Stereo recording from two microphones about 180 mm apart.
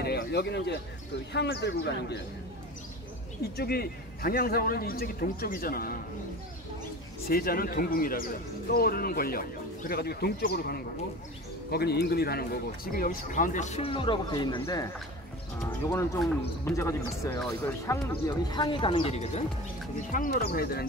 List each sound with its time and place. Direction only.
0.0 s a man's voice: 60° left (ahead or behind)
3.5 s speech: 60° left (ahead or behind)
7.2 s speech: 55° left (ahead or behind); by 14.9 s 20° left (ahead or behind)
15.9 s a man's voice: 15° left (ahead or behind); by 19.4 s 35° left (ahead or behind)
20.1 s speech: 50° left (ahead or behind)